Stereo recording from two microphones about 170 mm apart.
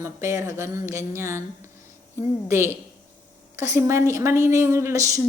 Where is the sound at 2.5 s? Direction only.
15° right (ahead or behind).